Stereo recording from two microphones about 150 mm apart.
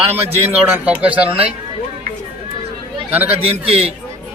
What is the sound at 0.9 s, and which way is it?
Speech, 10° right (ahead or behind).